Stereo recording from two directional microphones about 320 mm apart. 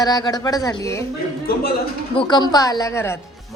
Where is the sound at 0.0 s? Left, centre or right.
Centre.